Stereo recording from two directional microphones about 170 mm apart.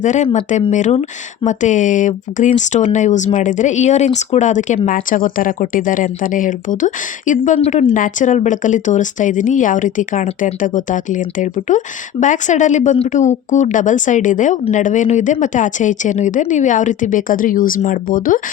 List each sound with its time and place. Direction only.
0.0 s speech: 45° left (ahead or behind)